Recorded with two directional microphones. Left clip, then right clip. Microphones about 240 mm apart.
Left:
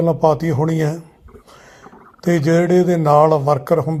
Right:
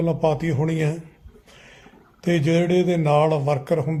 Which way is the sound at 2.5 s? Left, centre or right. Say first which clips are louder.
Left 6 dB; centre.